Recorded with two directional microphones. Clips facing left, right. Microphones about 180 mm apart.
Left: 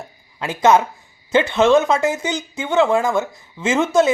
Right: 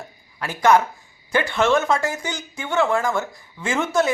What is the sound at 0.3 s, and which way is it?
Speech, 20° left (ahead or behind).